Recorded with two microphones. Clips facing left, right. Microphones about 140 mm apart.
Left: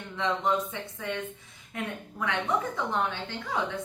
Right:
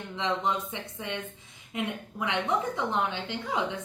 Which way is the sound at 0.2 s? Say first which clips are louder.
Left 2 dB; 20° right (ahead or behind).